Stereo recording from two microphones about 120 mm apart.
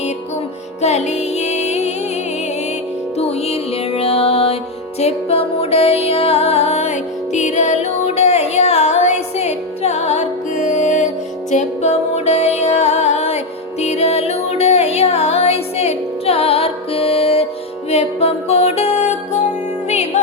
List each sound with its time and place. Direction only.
0.8 s music: 65° left (ahead or behind)
3.2 s music: 60° left (ahead or behind); by 11.1 s 90° left
11.5 s music: 70° left (ahead or behind)
19.9 s music: 65° left (ahead or behind)